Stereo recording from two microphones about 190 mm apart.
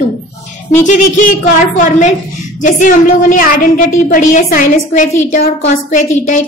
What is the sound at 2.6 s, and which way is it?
A woman's voice, 45° left (ahead or behind).